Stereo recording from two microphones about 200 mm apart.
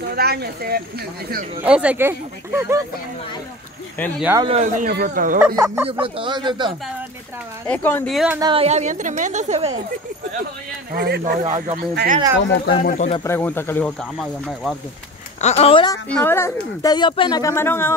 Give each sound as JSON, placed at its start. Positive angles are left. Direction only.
{"t": 0.1, "sound": "speech", "side_deg": -50}
{"t": 1.6, "sound": "speech", "side_deg": -5}
{"t": 4.4, "sound": "speech", "side_deg": -30}
{"t": 5.9, "sound": "speech", "side_deg": -25}
{"t": 7.6, "sound": "speech", "side_deg": 10}
{"t": 8.4, "sound": "a woman's voice", "side_deg": -25}
{"t": 10.9, "sound": "speech", "side_deg": -50}
{"t": 12.4, "sound": "speech", "side_deg": 65}
{"t": 12.7, "sound": "speech", "side_deg": 40}
{"t": 13.2, "sound": "speech", "side_deg": 10}
{"t": 15.4, "sound": "speech", "side_deg": 30}
{"t": 16.1, "sound": "speech", "side_deg": 10}